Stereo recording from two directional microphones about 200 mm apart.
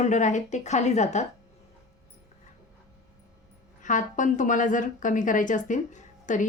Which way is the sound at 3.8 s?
40° left (ahead or behind).